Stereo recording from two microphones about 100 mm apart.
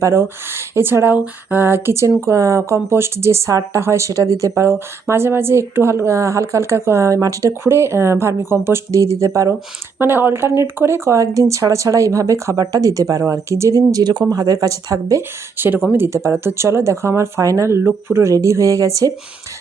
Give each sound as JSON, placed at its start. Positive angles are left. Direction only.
{"t": 0.0, "sound": "speech", "side_deg": -25}